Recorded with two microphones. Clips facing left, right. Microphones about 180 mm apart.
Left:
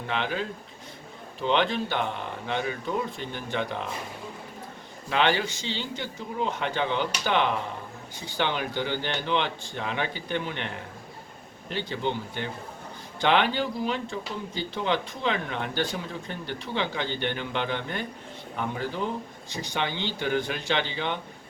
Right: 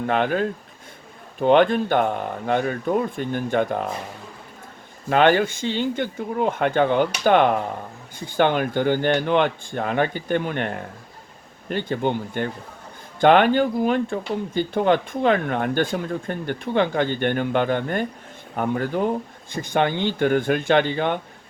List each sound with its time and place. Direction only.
0.1 s speech: 50° right (ahead or behind)
5.0 s speech: 50° right (ahead or behind)